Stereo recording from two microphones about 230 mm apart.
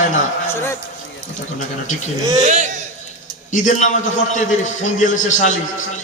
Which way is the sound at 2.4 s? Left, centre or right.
Right.